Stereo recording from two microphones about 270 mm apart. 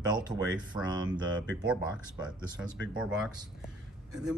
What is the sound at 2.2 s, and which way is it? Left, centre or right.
Speech, centre.